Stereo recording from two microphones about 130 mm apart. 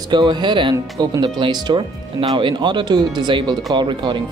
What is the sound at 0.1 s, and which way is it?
Speech, 35° right (ahead or behind).